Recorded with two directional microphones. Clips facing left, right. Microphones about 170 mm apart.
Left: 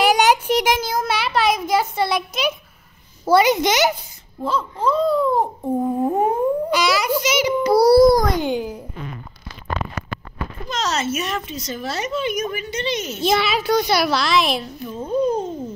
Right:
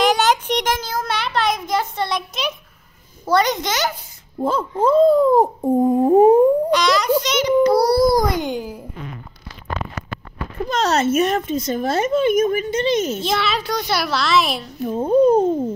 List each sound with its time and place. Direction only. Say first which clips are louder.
0.0 s a sound: left 1 dB; 10° left (ahead or behind)
3.3 s a child's voice: left 3 dB; 5° left (ahead or behind)
4.4 s speech: right 4 dB; 50° right (ahead or behind)
5.6 s humming: right 5 dB; 20° right (ahead or behind)
6.7 s a child's voice: right 3 dB; 5° left (ahead or behind)
10.7 s speech: right 6 dB; 55° right (ahead or behind)
13.2 s a child's voice: left 2 dB; 5° left (ahead or behind)
14.8 s speech: right 9 dB; 55° right (ahead or behind)